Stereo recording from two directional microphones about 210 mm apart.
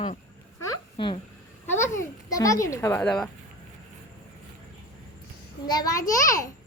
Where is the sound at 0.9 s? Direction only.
25° left (ahead or behind); by 3.2 s 5° left (ahead or behind).